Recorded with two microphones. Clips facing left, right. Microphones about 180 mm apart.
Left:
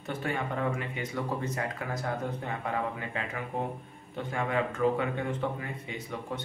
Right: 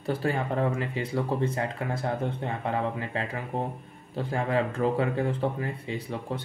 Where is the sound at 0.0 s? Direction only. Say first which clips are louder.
Right 5 dB; 35° right (ahead or behind).